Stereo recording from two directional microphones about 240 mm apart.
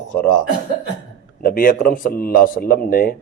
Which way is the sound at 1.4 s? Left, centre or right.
Left.